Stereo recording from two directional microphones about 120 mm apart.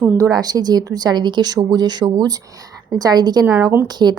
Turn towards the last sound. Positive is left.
turn(degrees=-35)  # may be behind; listen again after turning